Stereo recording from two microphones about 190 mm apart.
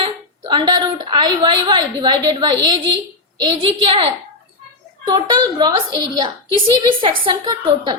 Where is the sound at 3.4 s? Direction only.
25° right (ahead or behind).